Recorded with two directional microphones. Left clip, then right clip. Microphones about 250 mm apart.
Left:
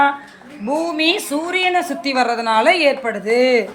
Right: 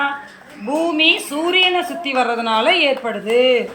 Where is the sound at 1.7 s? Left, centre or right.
Centre.